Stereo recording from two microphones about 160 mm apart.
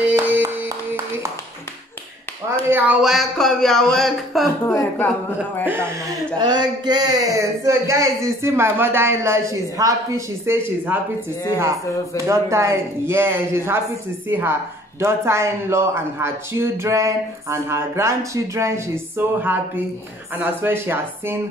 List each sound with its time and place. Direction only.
0.1 s a sound: 15° right (ahead or behind)
2.7 s speech: 5° right (ahead or behind)
4.7 s speech: 10° left (ahead or behind)
6.3 s a sound: 30° right (ahead or behind)
7.6 s speech: 20° right (ahead or behind)
12.3 s speech: 20° right (ahead or behind)